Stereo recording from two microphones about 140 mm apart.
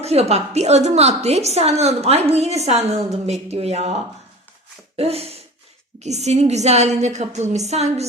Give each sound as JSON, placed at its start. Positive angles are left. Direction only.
{"t": 0.0, "sound": "a woman's voice", "side_deg": -50}
{"t": 4.9, "sound": "a woman's voice", "side_deg": -45}